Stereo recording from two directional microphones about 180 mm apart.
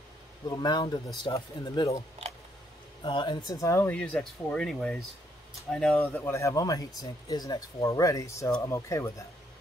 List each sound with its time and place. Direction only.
0.5 s speech: 25° left (ahead or behind)